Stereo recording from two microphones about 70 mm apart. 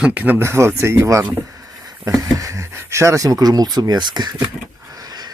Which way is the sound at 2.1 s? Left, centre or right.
Right.